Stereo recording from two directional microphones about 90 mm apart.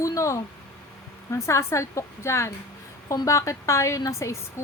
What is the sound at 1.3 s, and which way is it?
A woman's voice, 30° left (ahead or behind).